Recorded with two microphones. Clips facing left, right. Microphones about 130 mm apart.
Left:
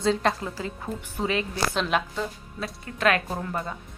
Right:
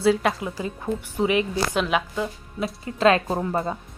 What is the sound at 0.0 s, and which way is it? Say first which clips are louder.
A woman's voice: right 3 dB; 10° right (ahead or behind).